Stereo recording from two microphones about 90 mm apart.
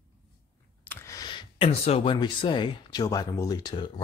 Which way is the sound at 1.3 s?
60° left (ahead or behind).